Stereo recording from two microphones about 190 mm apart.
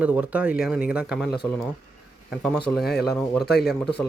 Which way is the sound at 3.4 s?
60° left (ahead or behind).